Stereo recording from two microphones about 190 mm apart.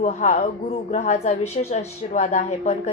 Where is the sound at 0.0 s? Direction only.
40° left (ahead or behind).